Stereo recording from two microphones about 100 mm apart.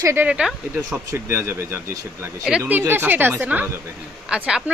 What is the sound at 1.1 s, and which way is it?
Speech, 25° right (ahead or behind).